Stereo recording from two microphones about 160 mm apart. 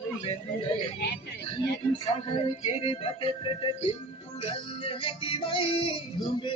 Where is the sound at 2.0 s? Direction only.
35° left (ahead or behind).